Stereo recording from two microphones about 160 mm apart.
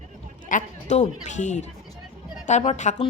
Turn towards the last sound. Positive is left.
turn(degrees=45)  # may be behind; listen again after turning